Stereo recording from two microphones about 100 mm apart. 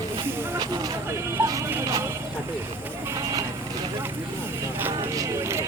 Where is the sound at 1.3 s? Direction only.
35° right (ahead or behind).